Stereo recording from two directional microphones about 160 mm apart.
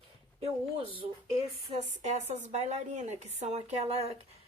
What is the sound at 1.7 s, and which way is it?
Speech, 45° right (ahead or behind).